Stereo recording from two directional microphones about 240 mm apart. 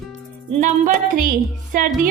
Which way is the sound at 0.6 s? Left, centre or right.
Right.